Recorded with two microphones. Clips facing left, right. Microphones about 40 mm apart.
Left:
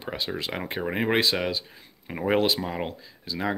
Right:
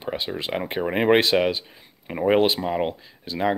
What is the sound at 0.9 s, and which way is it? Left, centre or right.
Speech, right.